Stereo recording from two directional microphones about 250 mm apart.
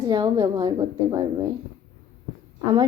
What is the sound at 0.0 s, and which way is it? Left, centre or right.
Speech, centre.